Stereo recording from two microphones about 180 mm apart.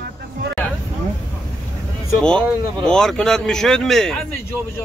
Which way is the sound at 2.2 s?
5° left (ahead or behind).